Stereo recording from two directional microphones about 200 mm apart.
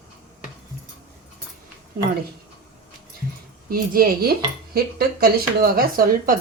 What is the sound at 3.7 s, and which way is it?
Speech, 45° right (ahead or behind).